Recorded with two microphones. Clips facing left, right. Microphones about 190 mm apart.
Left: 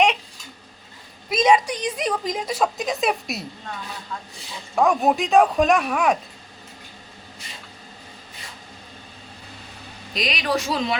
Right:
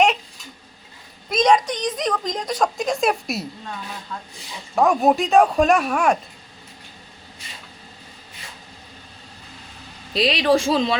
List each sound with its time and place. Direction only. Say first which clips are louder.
1.3 s a woman's voice: right 1 dB; 5° left (ahead or behind)
4.7 s a woman's voice: right 2 dB; centre (ahead or behind)
10.2 s speech: right 7 dB; 30° right (ahead or behind)